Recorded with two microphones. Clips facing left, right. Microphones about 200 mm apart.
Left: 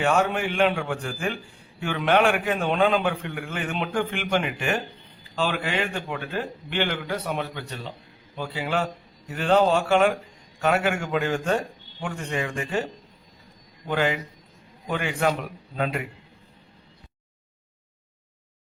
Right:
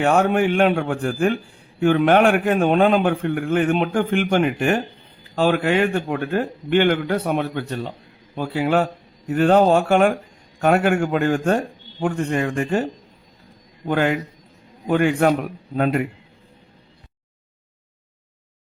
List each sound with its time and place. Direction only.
0.0 s a man's voice: 50° right (ahead or behind)